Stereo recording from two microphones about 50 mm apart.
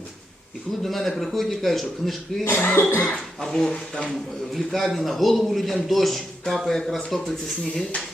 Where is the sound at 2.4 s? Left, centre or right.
Left.